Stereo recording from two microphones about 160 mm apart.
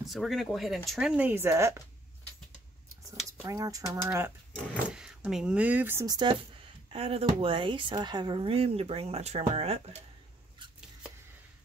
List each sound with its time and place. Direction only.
0.0 s speech: centre (ahead or behind); by 1.8 s 15° right (ahead or behind)
3.4 s speech: 20° right (ahead or behind)
4.9 s speech: 5° right (ahead or behind); by 6.4 s 25° right (ahead or behind)
6.9 s speech: 40° right (ahead or behind)